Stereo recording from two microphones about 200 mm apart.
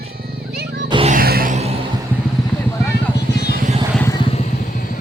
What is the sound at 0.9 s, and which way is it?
Music, 30° right (ahead or behind).